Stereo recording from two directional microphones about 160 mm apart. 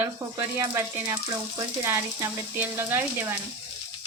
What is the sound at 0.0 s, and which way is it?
Speech, 15° right (ahead or behind).